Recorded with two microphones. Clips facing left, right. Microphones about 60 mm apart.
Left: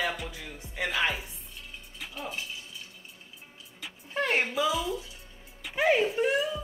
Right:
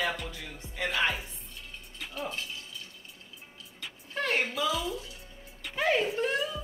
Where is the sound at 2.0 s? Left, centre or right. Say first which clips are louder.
Right 2 dB; centre.